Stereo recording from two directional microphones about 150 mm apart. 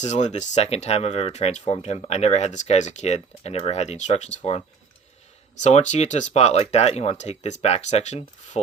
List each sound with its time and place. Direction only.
0.0 s speech: 50° left (ahead or behind)
5.6 s speech: 50° left (ahead or behind)